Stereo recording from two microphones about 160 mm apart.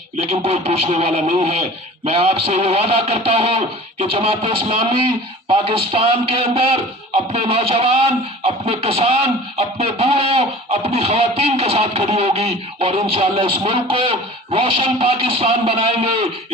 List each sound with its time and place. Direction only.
0.3 s speech: 40° right (ahead or behind)